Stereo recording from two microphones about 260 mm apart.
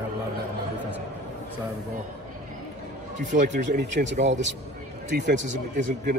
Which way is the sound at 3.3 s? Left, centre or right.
Right.